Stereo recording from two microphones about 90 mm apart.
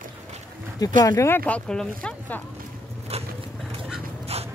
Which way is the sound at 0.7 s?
35° left (ahead or behind).